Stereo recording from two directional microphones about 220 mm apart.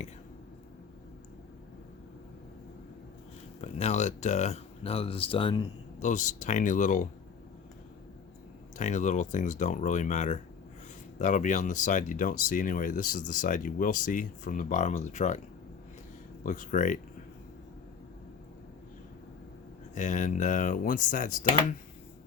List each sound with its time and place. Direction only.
3.6 s speech: 30° left (ahead or behind)
8.8 s speech: 35° left (ahead or behind)
16.4 s speech: 35° left (ahead or behind)
20.0 s speech: 35° left (ahead or behind)